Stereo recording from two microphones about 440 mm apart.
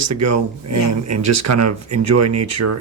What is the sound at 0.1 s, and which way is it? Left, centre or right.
Speech, right.